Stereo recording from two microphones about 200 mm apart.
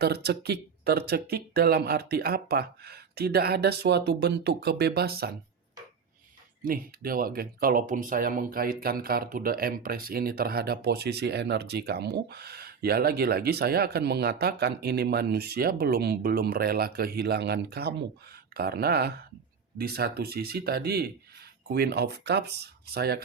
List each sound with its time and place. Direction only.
0.0 s speech: 55° right (ahead or behind)
6.7 s speech: 45° right (ahead or behind)